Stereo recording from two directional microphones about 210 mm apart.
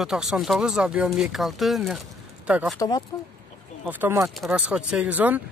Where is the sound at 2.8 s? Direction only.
20° left (ahead or behind).